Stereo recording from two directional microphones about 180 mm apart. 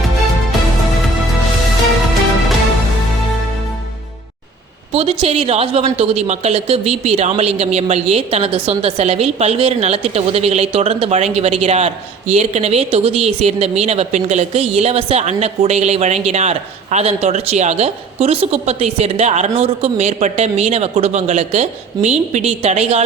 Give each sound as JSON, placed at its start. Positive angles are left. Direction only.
{"t": 4.9, "sound": "speech", "side_deg": -35}